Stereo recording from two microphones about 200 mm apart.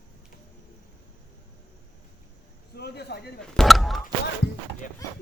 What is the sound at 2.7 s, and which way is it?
Speech, 55° left (ahead or behind).